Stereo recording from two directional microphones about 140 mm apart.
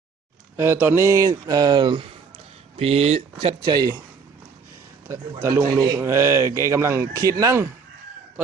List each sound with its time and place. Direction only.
0.5 s a man's voice: 15° right (ahead or behind); by 2.1 s 40° right (ahead or behind)
2.7 s speech: 50° right (ahead or behind)
3.4 s a man's voice: 30° right (ahead or behind)
5.4 s a man's voice: 20° right (ahead or behind)